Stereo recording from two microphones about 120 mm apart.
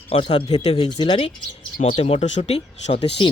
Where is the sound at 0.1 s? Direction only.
50° left (ahead or behind).